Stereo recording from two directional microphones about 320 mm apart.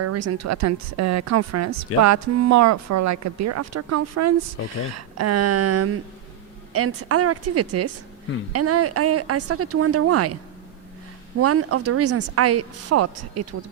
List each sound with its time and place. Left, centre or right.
0.0 s speech: right
11.3 s speech: right